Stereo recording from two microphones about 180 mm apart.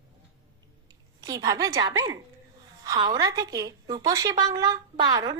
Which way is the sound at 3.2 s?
20° right (ahead or behind).